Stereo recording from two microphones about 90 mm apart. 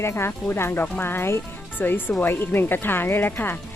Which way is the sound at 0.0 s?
30° left (ahead or behind).